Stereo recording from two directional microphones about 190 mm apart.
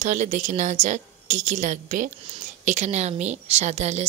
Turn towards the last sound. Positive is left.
turn(degrees=-35)  # may be behind; listen again after turning